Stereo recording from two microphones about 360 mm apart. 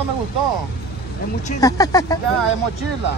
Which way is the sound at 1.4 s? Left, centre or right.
Centre.